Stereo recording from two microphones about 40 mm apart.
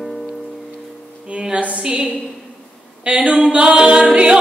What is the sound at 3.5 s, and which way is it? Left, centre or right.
A capella, right.